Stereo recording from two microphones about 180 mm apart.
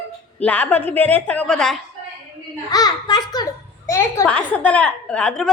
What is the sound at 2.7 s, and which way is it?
A child's voice, 20° left (ahead or behind).